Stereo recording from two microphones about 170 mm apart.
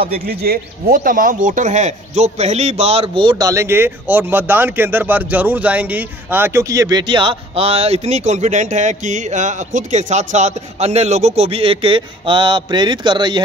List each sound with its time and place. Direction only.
0.1 s speech: 65° right (ahead or behind); by 13.4 s 25° right (ahead or behind)